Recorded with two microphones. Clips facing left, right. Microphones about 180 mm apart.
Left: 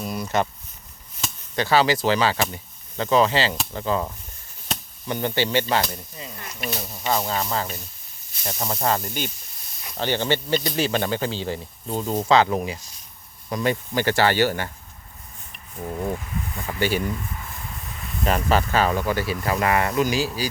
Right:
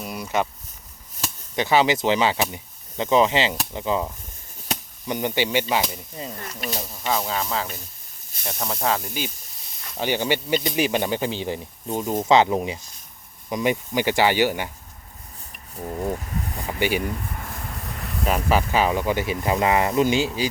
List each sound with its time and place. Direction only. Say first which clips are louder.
0.0 s a sound: left 1 dB; 10° right (ahead or behind)
1.5 s speech: even; 20° right (ahead or behind)
6.1 s speech: right 4 dB; 40° right (ahead or behind)
6.8 s speech: left 1 dB; 5° left (ahead or behind); by 14.7 s 15° right (ahead or behind)
15.8 s speech: even; 10° right (ahead or behind)
17.3 s a sound: right 2 dB; 50° right (ahead or behind)
18.3 s speech: even; 5° right (ahead or behind)